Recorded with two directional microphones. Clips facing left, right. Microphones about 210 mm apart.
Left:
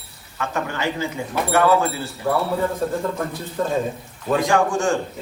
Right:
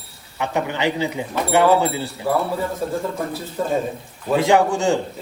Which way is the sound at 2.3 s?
5° right (ahead or behind).